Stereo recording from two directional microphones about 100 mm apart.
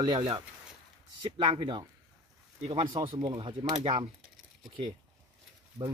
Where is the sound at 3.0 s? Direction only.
55° right (ahead or behind).